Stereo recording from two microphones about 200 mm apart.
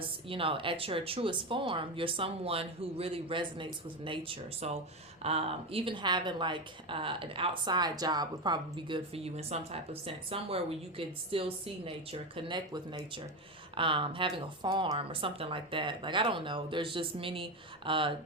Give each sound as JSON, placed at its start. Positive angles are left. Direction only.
{"t": 0.3, "sound": "a woman's voice", "side_deg": -25}